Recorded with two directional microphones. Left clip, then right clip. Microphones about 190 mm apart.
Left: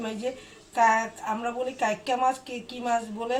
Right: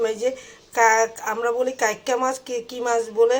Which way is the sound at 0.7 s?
15° right (ahead or behind).